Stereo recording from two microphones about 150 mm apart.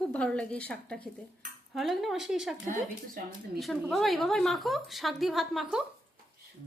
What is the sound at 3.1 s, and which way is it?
Speech, 70° right (ahead or behind).